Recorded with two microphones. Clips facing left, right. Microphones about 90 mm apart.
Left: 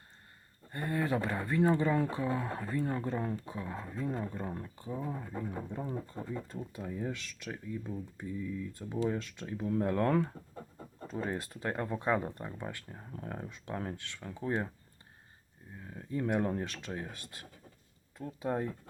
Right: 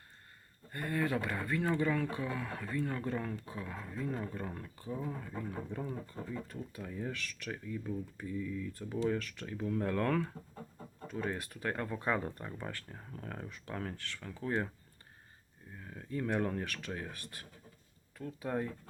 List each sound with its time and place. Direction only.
0.7 s speech: 25° left (ahead or behind)
11.1 s speech: 30° left (ahead or behind)
15.8 s speech: 10° left (ahead or behind)